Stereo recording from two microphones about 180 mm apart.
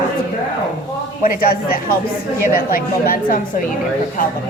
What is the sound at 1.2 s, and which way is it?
Speech, 55° left (ahead or behind).